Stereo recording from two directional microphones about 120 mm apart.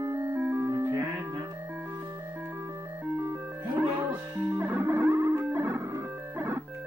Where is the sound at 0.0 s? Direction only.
20° right (ahead or behind).